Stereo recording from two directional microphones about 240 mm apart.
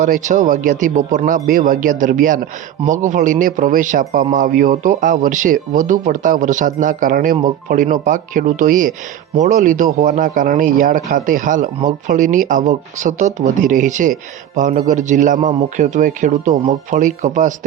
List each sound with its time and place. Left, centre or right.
0.0 s a man's voice: right